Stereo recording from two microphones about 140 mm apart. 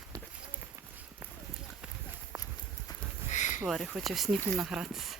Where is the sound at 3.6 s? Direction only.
Centre (ahead or behind).